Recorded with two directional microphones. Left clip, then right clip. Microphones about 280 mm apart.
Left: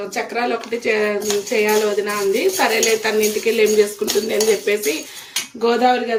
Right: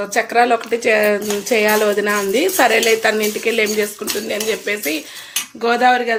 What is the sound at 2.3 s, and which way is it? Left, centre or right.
Speech, centre.